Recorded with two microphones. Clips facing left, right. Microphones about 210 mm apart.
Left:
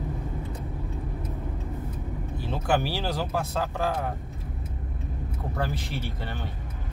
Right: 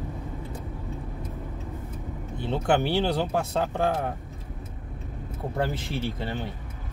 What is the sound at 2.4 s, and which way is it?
Speech, 25° right (ahead or behind).